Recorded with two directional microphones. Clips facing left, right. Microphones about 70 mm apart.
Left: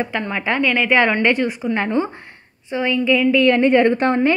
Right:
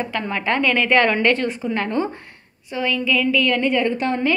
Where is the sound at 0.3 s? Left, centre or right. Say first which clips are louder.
Right 1 dB; centre; by 3.6 s left.